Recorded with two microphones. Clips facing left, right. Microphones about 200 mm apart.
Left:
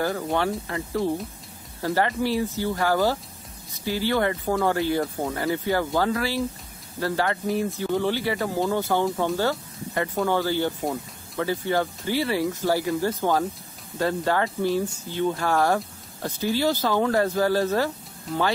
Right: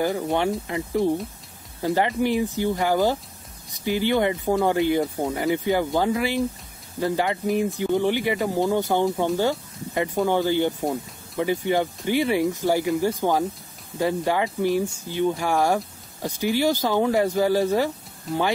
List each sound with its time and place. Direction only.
0.0 s speech: 15° right (ahead or behind)